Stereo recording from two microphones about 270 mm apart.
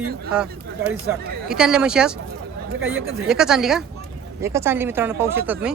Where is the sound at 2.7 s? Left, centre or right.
Right.